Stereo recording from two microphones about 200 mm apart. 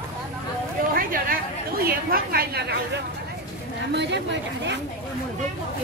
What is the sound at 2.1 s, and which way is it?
Speech, 50° right (ahead or behind).